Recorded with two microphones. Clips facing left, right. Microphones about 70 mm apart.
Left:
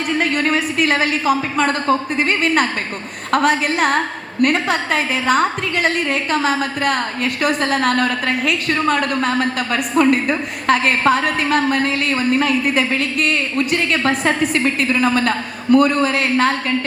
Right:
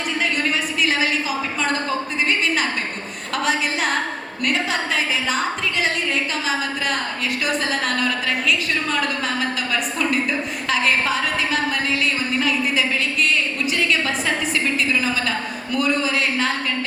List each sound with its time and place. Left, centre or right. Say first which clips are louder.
0.2 s a woman's voice: left 4 dB; left